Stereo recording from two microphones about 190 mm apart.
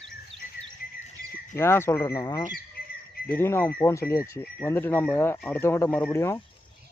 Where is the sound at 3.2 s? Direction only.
10° left (ahead or behind).